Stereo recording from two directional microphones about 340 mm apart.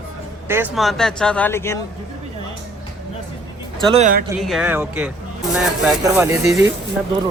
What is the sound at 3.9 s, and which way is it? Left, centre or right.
Speech, right.